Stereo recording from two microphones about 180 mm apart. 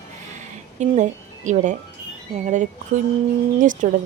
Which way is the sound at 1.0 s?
45° right (ahead or behind).